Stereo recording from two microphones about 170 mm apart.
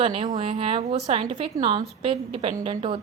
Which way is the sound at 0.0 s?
40° right (ahead or behind).